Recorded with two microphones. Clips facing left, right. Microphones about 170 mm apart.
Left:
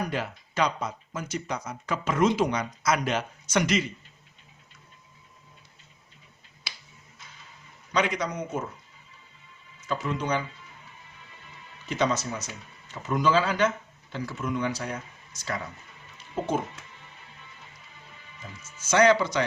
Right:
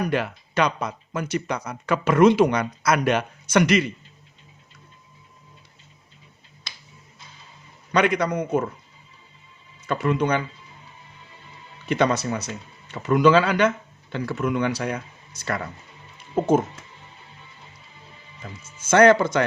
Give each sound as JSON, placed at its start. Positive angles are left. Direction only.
{"t": 0.1, "sound": "speech", "side_deg": -70}
{"t": 7.9, "sound": "speech", "side_deg": -60}
{"t": 9.8, "sound": "speech", "side_deg": -65}
{"t": 11.9, "sound": "speech", "side_deg": -65}
{"t": 16.4, "sound": "speech", "side_deg": -50}
{"t": 18.4, "sound": "speech", "side_deg": -75}
{"t": 18.8, "sound": "speech", "side_deg": -55}